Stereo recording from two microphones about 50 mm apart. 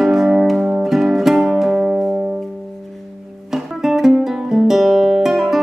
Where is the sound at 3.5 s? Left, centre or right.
Centre.